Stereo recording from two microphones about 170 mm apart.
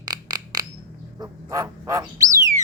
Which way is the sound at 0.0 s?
25° right (ahead or behind).